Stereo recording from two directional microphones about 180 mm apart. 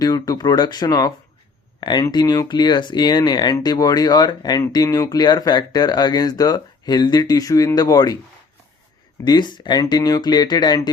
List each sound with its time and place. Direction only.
0.0 s speech: 20° left (ahead or behind)
9.2 s speech: 25° left (ahead or behind)